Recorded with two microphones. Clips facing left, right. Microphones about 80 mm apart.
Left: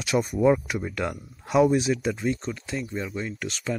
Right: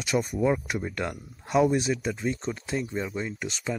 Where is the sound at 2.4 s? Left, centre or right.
Right.